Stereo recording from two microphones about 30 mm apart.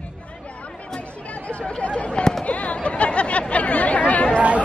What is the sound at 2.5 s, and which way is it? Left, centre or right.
Chatter, left.